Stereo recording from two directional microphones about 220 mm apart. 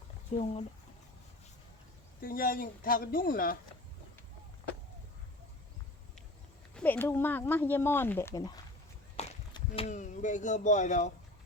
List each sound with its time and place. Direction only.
0.3 s speech: 30° left (ahead or behind)
2.2 s speech: 40° left (ahead or behind)
6.7 s speech: 10° left (ahead or behind); by 11.1 s 35° left (ahead or behind)